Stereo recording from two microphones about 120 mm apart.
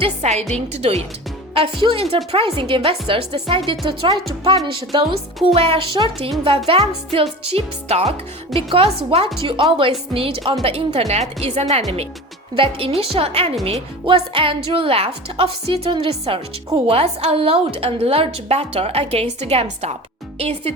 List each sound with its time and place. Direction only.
0.0 s a woman's voice: 70° right (ahead or behind)
1.8 s a woman's voice: 50° right (ahead or behind)
12.5 s a woman's voice: 50° right (ahead or behind)
14.0 s a woman's voice: 45° right (ahead or behind)